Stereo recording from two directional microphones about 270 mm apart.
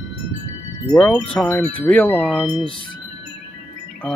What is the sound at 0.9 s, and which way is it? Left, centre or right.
Speech, centre.